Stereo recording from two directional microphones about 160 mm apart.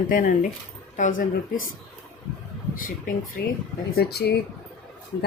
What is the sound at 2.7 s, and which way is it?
Speech, 60° left (ahead or behind).